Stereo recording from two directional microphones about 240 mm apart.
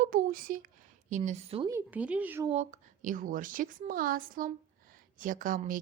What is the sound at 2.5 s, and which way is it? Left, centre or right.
A woman's voice, right.